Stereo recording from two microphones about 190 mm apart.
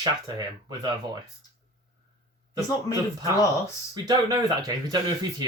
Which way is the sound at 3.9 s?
20° right (ahead or behind).